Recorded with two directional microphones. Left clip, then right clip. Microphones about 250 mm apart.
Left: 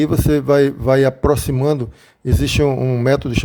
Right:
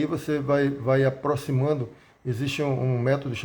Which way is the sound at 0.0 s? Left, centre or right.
Left.